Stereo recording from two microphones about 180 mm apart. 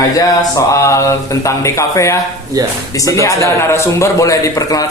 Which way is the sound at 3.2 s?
15° left (ahead or behind).